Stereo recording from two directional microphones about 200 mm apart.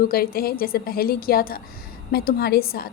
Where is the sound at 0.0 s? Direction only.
45° left (ahead or behind).